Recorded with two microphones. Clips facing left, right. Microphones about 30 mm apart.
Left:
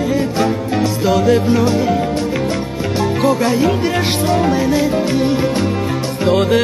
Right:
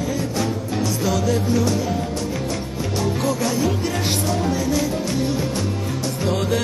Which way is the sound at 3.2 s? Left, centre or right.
Left.